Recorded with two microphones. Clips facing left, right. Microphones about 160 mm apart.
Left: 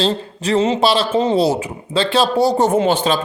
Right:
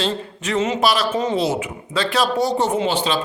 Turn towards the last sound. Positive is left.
turn(degrees=45)  # may be behind; listen again after turning